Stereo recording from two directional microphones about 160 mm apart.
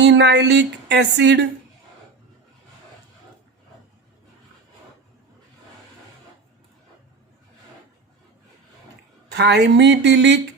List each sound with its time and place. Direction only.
0.0 s speech: 90° right
9.3 s speech: 90° right